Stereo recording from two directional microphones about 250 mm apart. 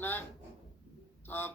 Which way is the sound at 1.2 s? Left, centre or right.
Centre.